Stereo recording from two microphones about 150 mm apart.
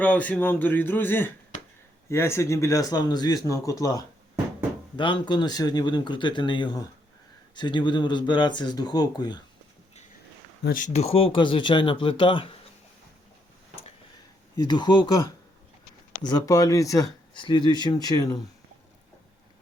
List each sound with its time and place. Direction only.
0.0 s a man's voice: 10° left (ahead or behind); by 9.4 s 25° left (ahead or behind)
10.6 s speech: 70° left (ahead or behind)
10.9 s speech: 40° left (ahead or behind)
14.6 s speech: 30° left (ahead or behind)